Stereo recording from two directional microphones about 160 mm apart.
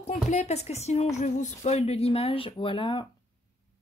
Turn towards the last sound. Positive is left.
turn(degrees=30)  # may be behind; listen again after turning